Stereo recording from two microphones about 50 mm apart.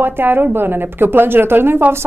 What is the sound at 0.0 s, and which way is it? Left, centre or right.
Speech, right.